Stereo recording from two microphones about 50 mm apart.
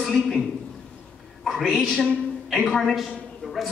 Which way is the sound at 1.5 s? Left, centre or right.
Centre.